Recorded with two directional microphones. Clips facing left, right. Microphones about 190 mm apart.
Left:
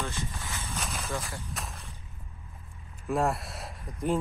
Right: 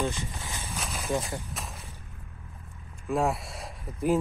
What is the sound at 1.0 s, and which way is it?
Speech, 20° right (ahead or behind).